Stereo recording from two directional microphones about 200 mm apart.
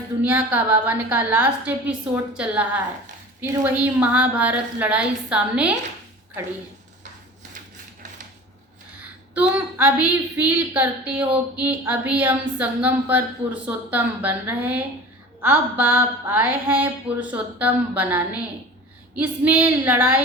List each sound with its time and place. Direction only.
0.2 s speech: 10° right (ahead or behind)
9.3 s speech: 10° right (ahead or behind)